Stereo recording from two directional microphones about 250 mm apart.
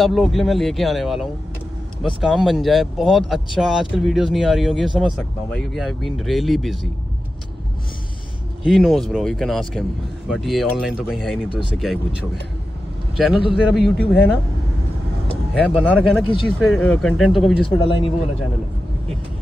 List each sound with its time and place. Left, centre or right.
0.0 s speech: centre
2.2 s speech: centre
8.6 s speech: centre
13.1 s a man's voice: centre
15.6 s speech: centre
17.7 s speech: left